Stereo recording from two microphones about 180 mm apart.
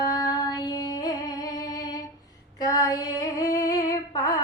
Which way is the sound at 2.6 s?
20° left (ahead or behind).